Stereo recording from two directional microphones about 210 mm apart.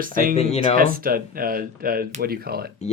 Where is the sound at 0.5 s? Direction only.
30° left (ahead or behind).